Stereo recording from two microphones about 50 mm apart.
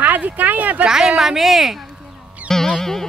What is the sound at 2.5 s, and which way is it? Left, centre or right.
Music, centre.